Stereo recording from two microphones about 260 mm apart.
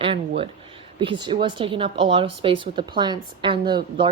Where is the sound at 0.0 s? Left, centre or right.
Right.